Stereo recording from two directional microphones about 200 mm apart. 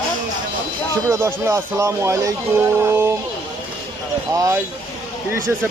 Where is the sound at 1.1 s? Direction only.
15° right (ahead or behind).